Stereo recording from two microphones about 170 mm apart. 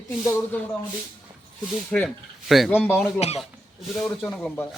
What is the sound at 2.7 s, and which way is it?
Speech, 15° left (ahead or behind).